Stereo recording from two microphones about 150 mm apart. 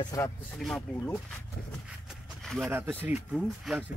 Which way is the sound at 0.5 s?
Centre (ahead or behind).